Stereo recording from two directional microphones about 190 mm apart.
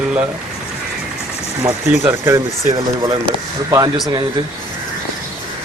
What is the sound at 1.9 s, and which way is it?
Speech, 10° right (ahead or behind).